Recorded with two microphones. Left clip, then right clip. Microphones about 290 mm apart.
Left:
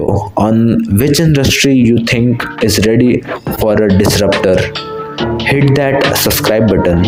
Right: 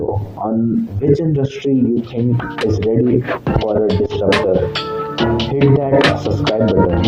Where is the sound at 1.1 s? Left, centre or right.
Left.